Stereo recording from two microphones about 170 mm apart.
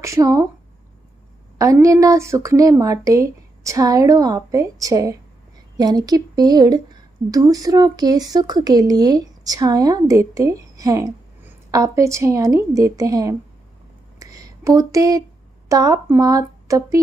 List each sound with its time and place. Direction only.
0.0 s speech: 20° right (ahead or behind)
1.6 s speech: 20° right (ahead or behind)
14.2 s a sound: 20° right (ahead or behind)
15.7 s speech: 20° right (ahead or behind)